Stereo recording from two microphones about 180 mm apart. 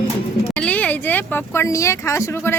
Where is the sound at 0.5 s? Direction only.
5° left (ahead or behind).